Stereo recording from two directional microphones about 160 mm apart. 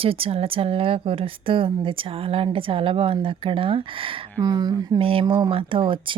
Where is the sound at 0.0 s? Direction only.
35° right (ahead or behind).